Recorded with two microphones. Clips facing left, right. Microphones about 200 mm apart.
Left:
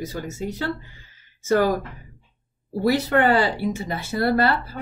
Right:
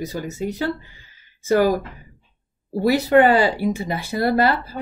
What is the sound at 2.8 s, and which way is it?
Speech, 15° right (ahead or behind).